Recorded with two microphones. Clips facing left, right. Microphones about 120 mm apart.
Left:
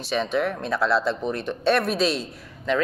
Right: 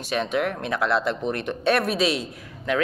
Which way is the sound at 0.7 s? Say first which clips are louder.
Left 1 dB; 15° right (ahead or behind).